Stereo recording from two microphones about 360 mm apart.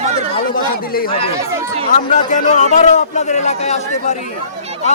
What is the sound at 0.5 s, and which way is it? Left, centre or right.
A man's voice, left.